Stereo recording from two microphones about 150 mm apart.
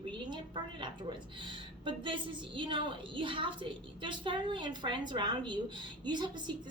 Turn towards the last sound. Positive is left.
turn(degrees=-30)  # may be behind; listen again after turning